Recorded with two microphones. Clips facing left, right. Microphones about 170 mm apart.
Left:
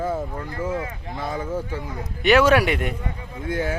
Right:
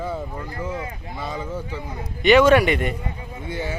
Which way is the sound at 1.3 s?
10° left (ahead or behind).